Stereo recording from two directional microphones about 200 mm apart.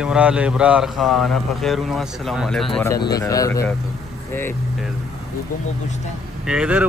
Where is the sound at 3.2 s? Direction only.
15° left (ahead or behind).